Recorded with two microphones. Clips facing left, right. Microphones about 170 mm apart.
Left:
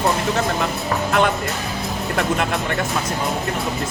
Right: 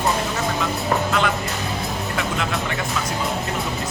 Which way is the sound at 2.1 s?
55° left (ahead or behind).